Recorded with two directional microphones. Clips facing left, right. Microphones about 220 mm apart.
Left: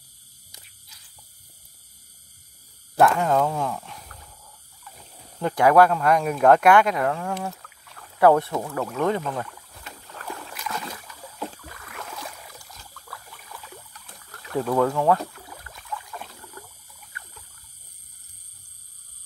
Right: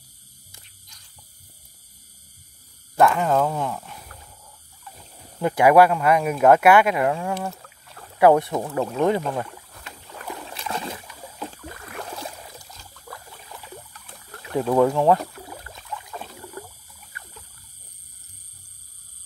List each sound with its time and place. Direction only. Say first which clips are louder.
0.6 s a sound: left 4 dB; 5° left (ahead or behind)
3.0 s speech: right 1 dB; centre (ahead or behind)
5.4 s speech: right 2 dB; 10° right (ahead or behind)
8.2 s speech: right 2 dB; 15° right (ahead or behind)
10.1 s boat: right 2 dB; 15° right (ahead or behind)
13.1 s a sound: right 3 dB; 25° right (ahead or behind)